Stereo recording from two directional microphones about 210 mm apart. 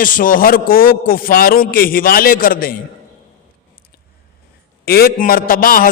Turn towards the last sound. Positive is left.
turn(degrees=45)  # may be behind; listen again after turning